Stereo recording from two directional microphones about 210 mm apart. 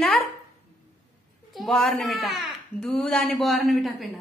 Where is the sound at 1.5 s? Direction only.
Centre (ahead or behind).